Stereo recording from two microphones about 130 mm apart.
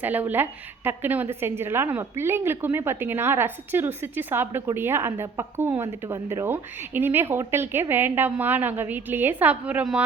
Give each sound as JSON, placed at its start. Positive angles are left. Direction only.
{"t": 0.0, "sound": "a woman's voice", "side_deg": -15}